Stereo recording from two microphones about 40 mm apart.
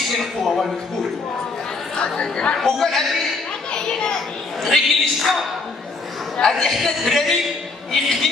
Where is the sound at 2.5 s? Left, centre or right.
Centre.